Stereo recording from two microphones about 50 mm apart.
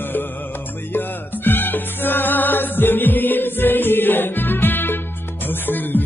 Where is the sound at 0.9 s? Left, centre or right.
Left.